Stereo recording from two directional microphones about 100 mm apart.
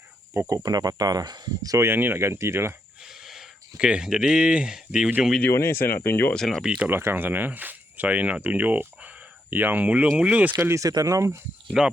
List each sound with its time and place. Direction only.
0.3 s speech: 35° right (ahead or behind)
1.9 s speech: 20° right (ahead or behind)
3.0 s speech: 5° right (ahead or behind)
5.4 s speech: 25° left (ahead or behind)
6.3 s speech: 5° left (ahead or behind)
6.7 s speech: 10° right (ahead or behind)
6.9 s speech: 25° right (ahead or behind)
10.6 s speech: 30° right (ahead or behind)
11.8 s speech: 5° right (ahead or behind)